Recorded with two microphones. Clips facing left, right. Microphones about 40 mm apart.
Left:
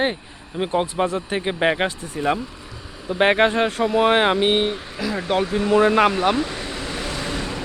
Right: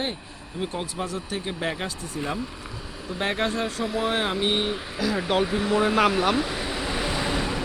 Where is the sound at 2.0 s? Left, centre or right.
Left.